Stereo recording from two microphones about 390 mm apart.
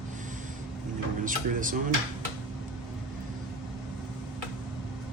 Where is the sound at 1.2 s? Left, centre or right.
Centre.